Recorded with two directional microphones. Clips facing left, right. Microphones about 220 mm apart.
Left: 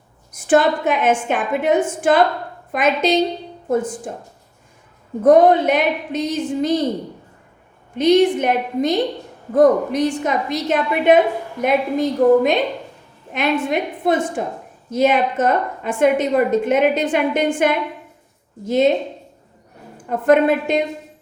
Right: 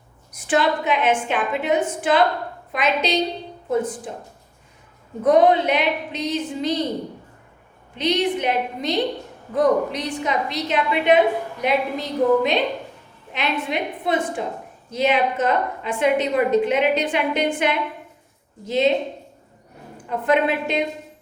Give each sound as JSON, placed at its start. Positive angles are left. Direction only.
{"t": 0.3, "sound": "a woman's voice", "side_deg": 45}
{"t": 5.2, "sound": "a woman's voice", "side_deg": 50}
{"t": 7.9, "sound": "a woman's voice", "side_deg": 50}
{"t": 20.1, "sound": "a woman's voice", "side_deg": 50}